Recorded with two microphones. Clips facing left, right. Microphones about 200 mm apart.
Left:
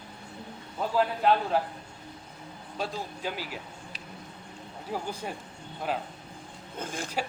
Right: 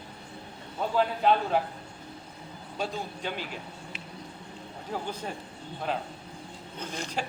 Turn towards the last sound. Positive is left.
turn(degrees=50)  # may be behind; listen again after turning